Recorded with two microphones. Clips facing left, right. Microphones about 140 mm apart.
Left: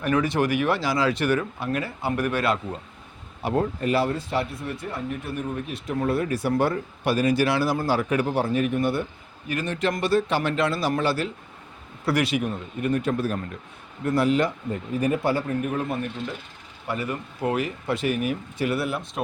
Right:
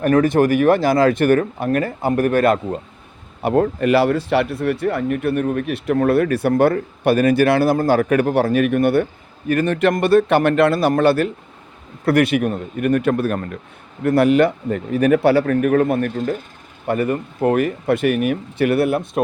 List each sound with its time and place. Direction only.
0.0 s speech: 50° right (ahead or behind)
3.4 s speech: 60° right (ahead or behind)
16.1 s speech: 45° right (ahead or behind)